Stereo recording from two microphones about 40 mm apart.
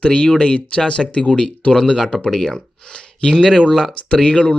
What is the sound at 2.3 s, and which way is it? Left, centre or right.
Speech, centre.